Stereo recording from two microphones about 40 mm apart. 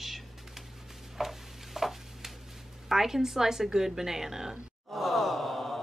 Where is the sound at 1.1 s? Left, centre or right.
Centre.